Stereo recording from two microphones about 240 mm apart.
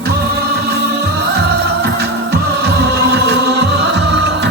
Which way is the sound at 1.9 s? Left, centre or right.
Right.